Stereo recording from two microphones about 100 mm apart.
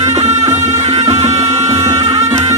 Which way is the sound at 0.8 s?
90° right.